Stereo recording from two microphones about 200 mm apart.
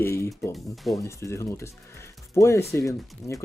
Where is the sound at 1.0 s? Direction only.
15° left (ahead or behind).